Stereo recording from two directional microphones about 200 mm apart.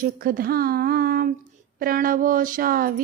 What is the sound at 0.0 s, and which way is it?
Speech, 50° right (ahead or behind).